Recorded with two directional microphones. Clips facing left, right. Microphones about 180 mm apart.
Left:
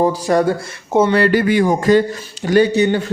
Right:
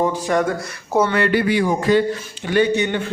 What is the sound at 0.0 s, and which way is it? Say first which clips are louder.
A man's voice: left 4 dB; 35° left (ahead or behind).